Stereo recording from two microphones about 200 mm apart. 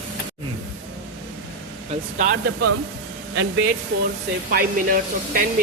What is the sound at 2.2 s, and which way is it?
Speech, 45° right (ahead or behind).